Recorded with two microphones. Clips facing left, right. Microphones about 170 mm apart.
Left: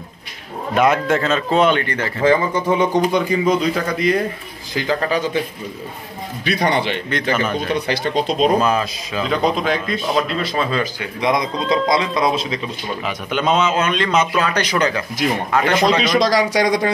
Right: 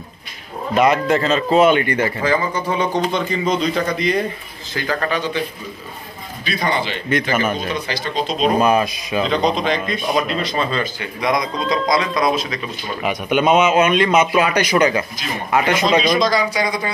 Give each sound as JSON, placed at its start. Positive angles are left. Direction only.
{"t": 0.7, "sound": "speech", "side_deg": 0}
{"t": 2.2, "sound": "a man's voice", "side_deg": 20}
{"t": 4.7, "sound": "a man's voice", "side_deg": 20}
{"t": 5.1, "sound": "a man's voice", "side_deg": 40}
{"t": 6.4, "sound": "a man's voice", "side_deg": 65}
{"t": 7.1, "sound": "a man's voice", "side_deg": -10}
{"t": 7.6, "sound": "speech", "side_deg": 65}
{"t": 8.5, "sound": "a man's voice", "side_deg": -15}
{"t": 9.3, "sound": "a man's voice", "side_deg": 5}
{"t": 9.9, "sound": "a man's voice", "side_deg": -15}
{"t": 10.2, "sound": "speech", "side_deg": 0}
{"t": 11.1, "sound": "a man's voice", "side_deg": 25}
{"t": 13.0, "sound": "a man's voice", "side_deg": -10}
{"t": 16.0, "sound": "speech", "side_deg": 80}